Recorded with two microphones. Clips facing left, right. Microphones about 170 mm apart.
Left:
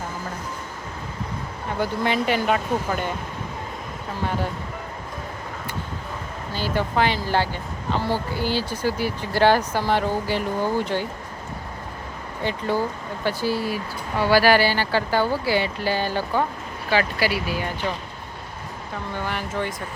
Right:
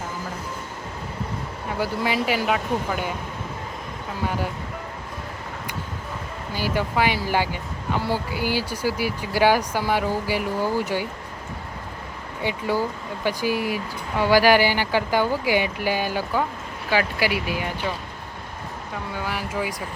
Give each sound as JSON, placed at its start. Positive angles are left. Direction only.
{"t": 1.8, "sound": "speech", "side_deg": -5}
{"t": 6.5, "sound": "speech", "side_deg": -10}
{"t": 12.4, "sound": "speech", "side_deg": -10}
{"t": 19.1, "sound": "speech", "side_deg": -5}